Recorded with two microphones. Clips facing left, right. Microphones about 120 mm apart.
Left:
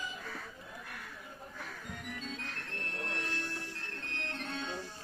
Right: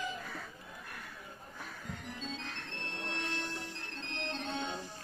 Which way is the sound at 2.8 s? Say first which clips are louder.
Even; 25° right (ahead or behind).